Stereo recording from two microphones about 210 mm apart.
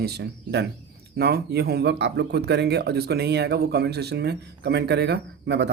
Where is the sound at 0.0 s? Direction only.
50° right (ahead or behind).